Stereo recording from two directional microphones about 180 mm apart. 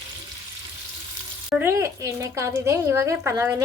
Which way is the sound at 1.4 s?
10° right (ahead or behind).